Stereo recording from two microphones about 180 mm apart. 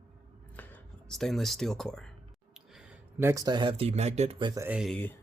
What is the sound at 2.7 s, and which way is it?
Speech, 10° right (ahead or behind).